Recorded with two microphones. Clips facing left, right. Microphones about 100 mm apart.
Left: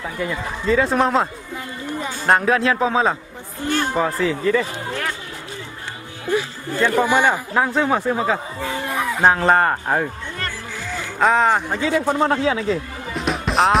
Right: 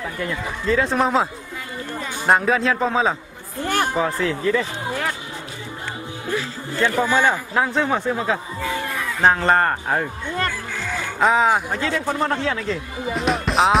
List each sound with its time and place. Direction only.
0.2 s speech: centre (ahead or behind)
1.9 s a sound: 15° left (ahead or behind)
2.2 s speech: centre (ahead or behind)
7.1 s a man's voice: 15° left (ahead or behind)
7.5 s speech: centre (ahead or behind)
8.5 s a sound: 20° left (ahead or behind)
9.2 s speech: 5° left (ahead or behind)
10.3 s music: 50° right (ahead or behind)
11.1 s speech: centre (ahead or behind)
11.7 s a man's voice: 10° left (ahead or behind)